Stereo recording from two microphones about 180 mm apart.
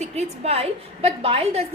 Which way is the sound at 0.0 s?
35° right (ahead or behind).